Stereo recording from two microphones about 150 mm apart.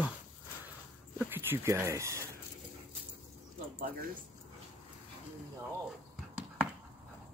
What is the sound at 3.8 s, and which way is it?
Speech, 75° right (ahead or behind).